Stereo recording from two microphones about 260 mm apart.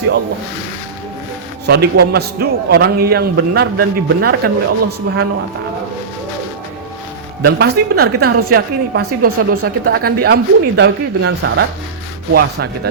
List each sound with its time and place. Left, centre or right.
1.6 s a man's voice: right
7.4 s a man's voice: right